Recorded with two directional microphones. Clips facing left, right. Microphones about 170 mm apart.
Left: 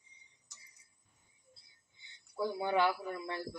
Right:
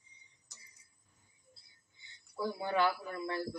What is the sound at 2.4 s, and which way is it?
Speech, 20° left (ahead or behind).